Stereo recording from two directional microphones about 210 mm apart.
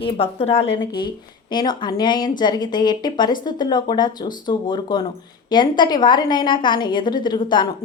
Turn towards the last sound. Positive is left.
turn(degrees=20)  # may be behind; listen again after turning